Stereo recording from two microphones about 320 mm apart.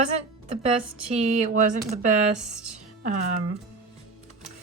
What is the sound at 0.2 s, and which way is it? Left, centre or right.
Speech, centre.